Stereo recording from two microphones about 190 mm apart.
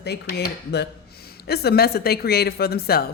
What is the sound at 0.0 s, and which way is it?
A woman's voice, 60° left (ahead or behind).